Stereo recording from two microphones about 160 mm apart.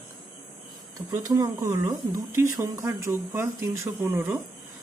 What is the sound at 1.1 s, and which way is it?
A man's voice, 20° right (ahead or behind).